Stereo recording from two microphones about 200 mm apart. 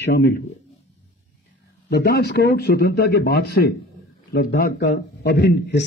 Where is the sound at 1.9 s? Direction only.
55° left (ahead or behind).